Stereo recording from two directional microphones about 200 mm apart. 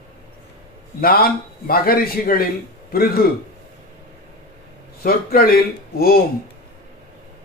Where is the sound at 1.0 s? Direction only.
50° left (ahead or behind).